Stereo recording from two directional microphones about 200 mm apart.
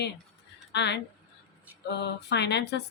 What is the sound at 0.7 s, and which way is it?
Speech, 60° left (ahead or behind).